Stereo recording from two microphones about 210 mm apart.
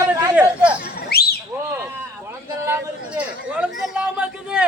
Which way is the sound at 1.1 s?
50° left (ahead or behind).